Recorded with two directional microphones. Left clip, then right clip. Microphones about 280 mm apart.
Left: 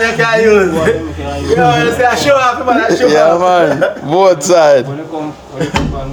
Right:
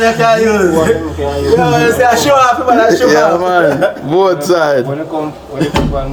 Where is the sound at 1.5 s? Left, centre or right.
Centre.